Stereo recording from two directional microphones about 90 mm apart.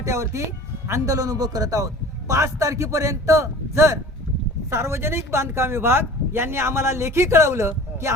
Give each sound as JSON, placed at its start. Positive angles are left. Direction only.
{"t": 0.0, "sound": "a man's voice", "side_deg": -35}